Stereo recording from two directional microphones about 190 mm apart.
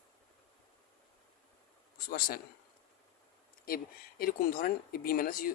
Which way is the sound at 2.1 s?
50° left (ahead or behind).